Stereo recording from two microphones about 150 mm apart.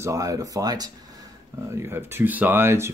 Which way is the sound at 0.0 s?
20° right (ahead or behind).